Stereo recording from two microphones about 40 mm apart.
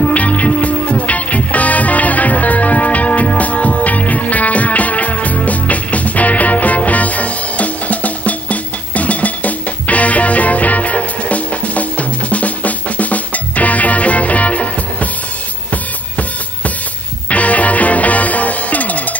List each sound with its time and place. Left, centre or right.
0.0 s music: left
15.7 s drum: left
17.3 s music: left